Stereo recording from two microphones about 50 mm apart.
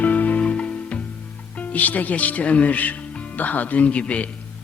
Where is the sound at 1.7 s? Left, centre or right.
Left.